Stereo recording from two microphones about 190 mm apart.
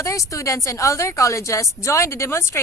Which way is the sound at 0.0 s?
15° left (ahead or behind).